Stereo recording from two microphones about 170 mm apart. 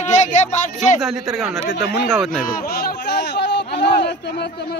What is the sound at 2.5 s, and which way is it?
Speech, 60° left (ahead or behind).